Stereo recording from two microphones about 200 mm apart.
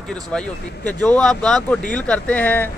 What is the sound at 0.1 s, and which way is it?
Speech, 5° left (ahead or behind).